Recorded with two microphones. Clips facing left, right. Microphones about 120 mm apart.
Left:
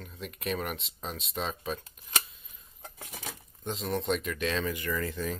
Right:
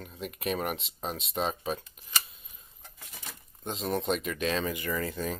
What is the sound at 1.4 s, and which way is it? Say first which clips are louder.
Speech: right 4 dB; 25° right (ahead or behind).